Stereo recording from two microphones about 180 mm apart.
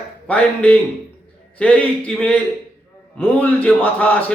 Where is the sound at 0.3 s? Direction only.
5° left (ahead or behind).